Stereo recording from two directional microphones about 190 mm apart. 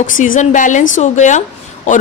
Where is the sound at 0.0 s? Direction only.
45° left (ahead or behind).